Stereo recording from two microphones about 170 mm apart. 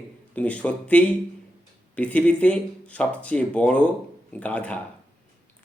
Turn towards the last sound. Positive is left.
turn(degrees=5)  # may be behind; listen again after turning